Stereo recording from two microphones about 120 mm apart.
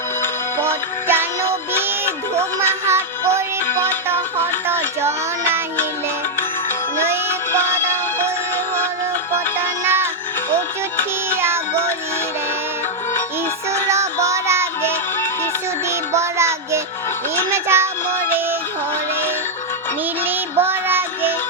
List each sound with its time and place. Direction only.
0.6 s music: 20° right (ahead or behind)
2.8 s music: 20° right (ahead or behind)
9.8 s music: 20° right (ahead or behind)
11.3 s music: 20° right (ahead or behind)
13.9 s music: 25° right (ahead or behind)
16.1 s music: 25° right (ahead or behind)
20.2 s music: 20° right (ahead or behind)